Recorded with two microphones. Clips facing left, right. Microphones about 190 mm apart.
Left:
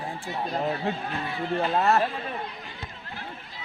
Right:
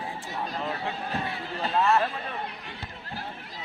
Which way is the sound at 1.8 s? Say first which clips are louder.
Right 1 dB; 40° left (ahead or behind).